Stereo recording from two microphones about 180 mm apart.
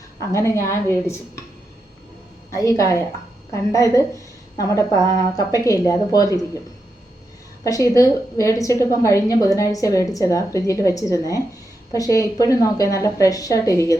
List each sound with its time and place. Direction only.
0.3 s a woman's voice: 15° left (ahead or behind)
2.6 s a woman's voice: 15° left (ahead or behind)
7.6 s a woman's voice: 20° left (ahead or behind)